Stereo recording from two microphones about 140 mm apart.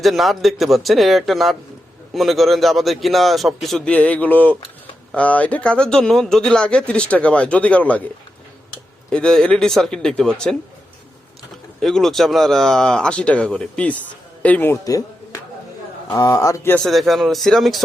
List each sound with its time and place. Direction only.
0.0 s a man's voice: centre (ahead or behind)
9.0 s a man's voice: 5° left (ahead or behind)
11.8 s a man's voice: centre (ahead or behind)
14.8 s speech: 25° left (ahead or behind)
16.7 s a man's voice: centre (ahead or behind)